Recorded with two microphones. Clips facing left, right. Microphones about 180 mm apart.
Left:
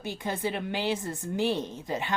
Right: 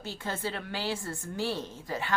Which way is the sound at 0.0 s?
15° left (ahead or behind).